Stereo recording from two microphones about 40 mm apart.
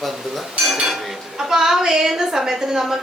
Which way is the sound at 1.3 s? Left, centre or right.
Centre.